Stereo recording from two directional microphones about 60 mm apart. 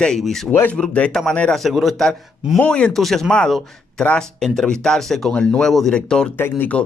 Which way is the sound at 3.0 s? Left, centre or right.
Centre.